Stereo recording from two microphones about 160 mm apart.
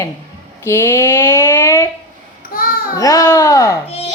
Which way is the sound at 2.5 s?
65° left (ahead or behind).